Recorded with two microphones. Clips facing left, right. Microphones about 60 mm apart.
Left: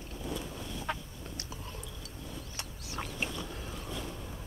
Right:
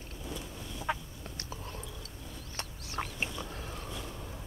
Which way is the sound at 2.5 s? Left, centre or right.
Right.